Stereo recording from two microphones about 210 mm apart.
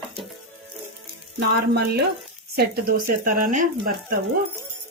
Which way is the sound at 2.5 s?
45° right (ahead or behind).